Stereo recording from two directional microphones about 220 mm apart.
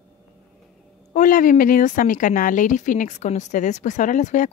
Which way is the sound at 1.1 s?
35° left (ahead or behind).